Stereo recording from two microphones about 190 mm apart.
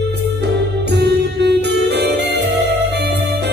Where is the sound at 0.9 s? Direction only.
65° right (ahead or behind).